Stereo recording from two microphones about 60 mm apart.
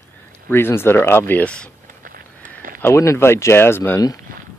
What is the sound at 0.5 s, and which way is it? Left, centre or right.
Speech, left.